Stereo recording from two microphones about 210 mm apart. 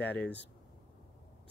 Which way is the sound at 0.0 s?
10° left (ahead or behind).